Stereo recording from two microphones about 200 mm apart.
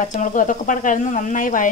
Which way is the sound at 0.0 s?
40° left (ahead or behind).